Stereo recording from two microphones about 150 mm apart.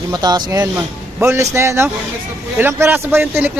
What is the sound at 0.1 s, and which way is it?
A man's voice, 25° right (ahead or behind).